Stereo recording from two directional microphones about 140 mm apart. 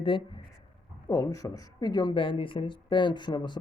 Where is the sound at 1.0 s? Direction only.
25° left (ahead or behind).